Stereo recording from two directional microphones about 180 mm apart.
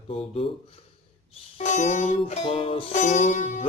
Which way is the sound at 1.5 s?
40° left (ahead or behind).